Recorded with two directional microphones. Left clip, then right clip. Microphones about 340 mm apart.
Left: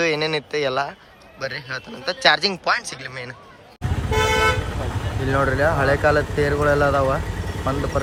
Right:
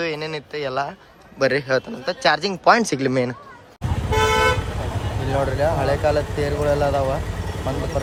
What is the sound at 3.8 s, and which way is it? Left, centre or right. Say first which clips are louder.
Toot: right 1 dB; centre.